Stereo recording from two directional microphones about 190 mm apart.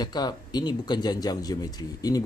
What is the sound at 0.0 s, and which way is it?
Speech, 20° left (ahead or behind).